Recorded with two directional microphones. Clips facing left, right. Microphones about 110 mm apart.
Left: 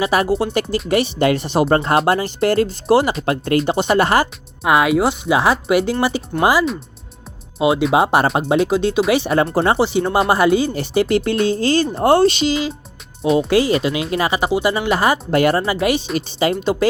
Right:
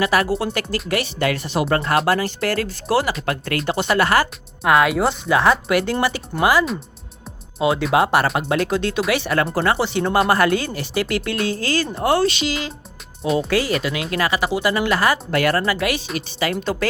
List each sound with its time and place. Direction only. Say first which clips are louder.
0.0 s speech: left 2 dB; 25° left (ahead or behind)
4.6 s speech: left 2 dB; 5° left (ahead or behind)
7.6 s speech: left 3 dB; 10° left (ahead or behind)
7.9 s speech: left 2 dB; 25° left (ahead or behind)
10.8 s speech: left 6 dB; 30° left (ahead or behind)
13.2 s speech: left 4 dB; centre (ahead or behind)
13.5 s speech: left 5 dB; 25° left (ahead or behind)